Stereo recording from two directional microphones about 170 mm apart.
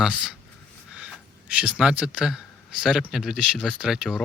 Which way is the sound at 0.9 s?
5° right (ahead or behind).